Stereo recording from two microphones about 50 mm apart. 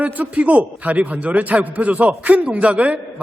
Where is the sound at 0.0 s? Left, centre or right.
Right.